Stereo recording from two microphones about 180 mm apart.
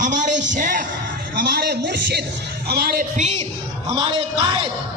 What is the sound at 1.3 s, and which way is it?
Speech, 60° right (ahead or behind).